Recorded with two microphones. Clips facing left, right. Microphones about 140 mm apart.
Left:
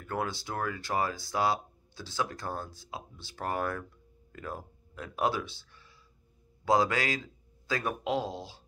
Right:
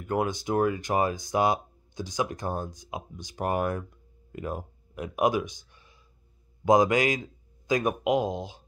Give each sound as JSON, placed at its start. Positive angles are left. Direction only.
{"t": 0.0, "sound": "a man's voice", "side_deg": -20}